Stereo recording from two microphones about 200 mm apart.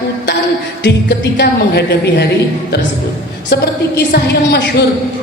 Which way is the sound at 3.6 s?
55° left (ahead or behind).